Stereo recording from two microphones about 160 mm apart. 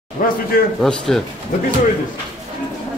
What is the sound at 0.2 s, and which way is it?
Speech, 60° left (ahead or behind).